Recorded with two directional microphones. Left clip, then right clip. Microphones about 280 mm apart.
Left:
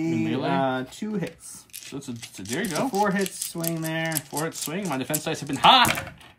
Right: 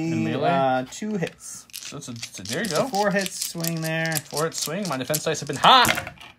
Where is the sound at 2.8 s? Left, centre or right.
Right.